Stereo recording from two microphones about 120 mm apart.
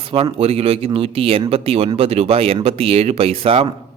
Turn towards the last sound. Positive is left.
turn(degrees=-50)  # may be behind; listen again after turning